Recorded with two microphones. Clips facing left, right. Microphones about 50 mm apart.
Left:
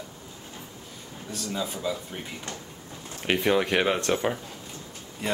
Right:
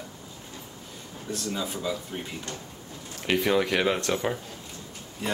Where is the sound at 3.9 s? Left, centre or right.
Left.